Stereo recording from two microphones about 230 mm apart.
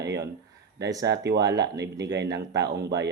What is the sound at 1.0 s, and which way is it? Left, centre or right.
Speech, right.